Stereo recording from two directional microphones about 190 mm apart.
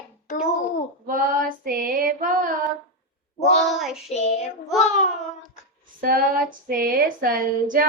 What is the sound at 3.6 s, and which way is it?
Child singing, centre (ahead or behind).